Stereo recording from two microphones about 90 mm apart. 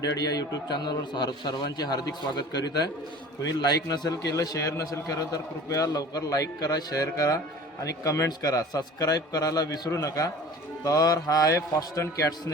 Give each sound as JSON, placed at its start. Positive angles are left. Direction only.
{"t": 0.2, "sound": "a man's voice", "side_deg": 45}